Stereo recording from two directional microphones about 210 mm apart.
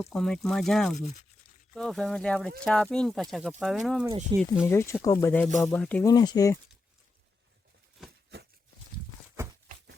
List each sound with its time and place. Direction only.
0.0 s speech: centre (ahead or behind)
4.3 s speech: 20° right (ahead or behind)
4.6 s speech: 10° left (ahead or behind)